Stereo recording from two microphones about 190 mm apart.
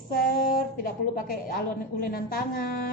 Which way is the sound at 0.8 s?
45° left (ahead or behind).